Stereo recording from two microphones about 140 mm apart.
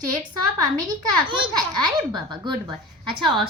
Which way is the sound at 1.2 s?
35° right (ahead or behind).